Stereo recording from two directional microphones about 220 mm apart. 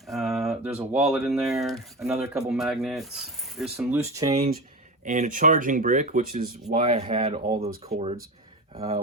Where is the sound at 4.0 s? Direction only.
15° right (ahead or behind).